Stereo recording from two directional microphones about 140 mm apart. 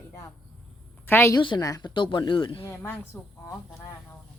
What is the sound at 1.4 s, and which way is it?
Speech, 30° left (ahead or behind).